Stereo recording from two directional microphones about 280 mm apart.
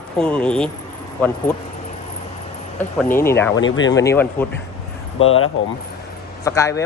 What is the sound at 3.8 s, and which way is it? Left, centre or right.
Speech, left.